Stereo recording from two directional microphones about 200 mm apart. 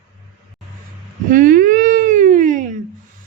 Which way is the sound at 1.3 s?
45° right (ahead or behind).